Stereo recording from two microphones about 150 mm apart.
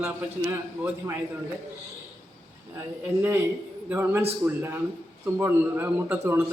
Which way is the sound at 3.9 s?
15° right (ahead or behind).